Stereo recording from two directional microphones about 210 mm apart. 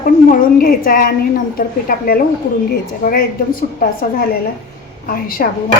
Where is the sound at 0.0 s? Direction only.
40° left (ahead or behind).